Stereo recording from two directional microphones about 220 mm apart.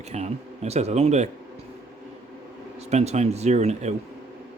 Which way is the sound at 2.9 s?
30° right (ahead or behind).